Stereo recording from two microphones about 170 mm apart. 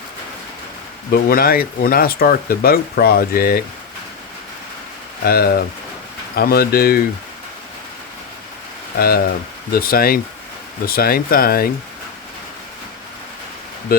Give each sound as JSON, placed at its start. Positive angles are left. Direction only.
{"t": 1.1, "sound": "speech", "side_deg": 60}
{"t": 5.2, "sound": "speech", "side_deg": 65}
{"t": 9.0, "sound": "speech", "side_deg": 65}